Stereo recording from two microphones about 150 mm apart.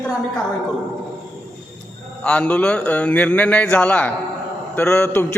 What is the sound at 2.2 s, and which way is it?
A man's voice, 10° left (ahead or behind).